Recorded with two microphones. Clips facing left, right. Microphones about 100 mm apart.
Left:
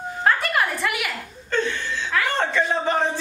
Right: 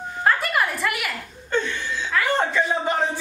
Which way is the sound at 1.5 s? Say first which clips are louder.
Even; 15° right (ahead or behind).